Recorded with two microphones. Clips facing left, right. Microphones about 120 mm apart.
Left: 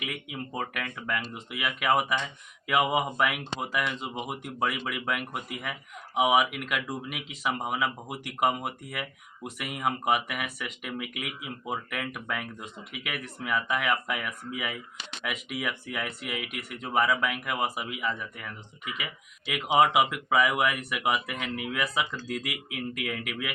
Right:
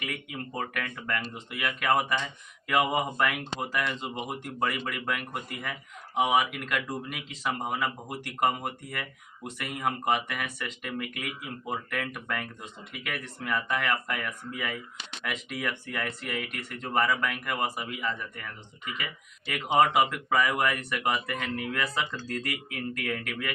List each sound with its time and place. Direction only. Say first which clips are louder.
0.0 s speech: even; 5° left (ahead or behind)